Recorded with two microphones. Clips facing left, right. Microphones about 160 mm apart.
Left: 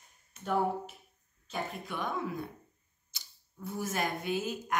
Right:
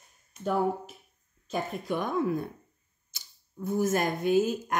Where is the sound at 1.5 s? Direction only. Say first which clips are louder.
Right 7 dB; 45° right (ahead or behind).